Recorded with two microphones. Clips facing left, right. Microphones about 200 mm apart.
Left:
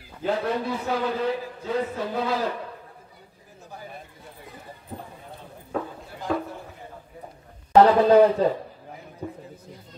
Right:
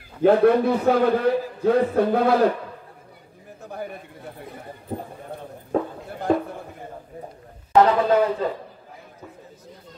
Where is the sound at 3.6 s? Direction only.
60° right (ahead or behind).